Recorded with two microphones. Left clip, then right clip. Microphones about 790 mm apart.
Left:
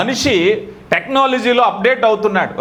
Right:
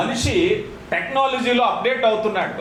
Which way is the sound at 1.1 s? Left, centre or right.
Left.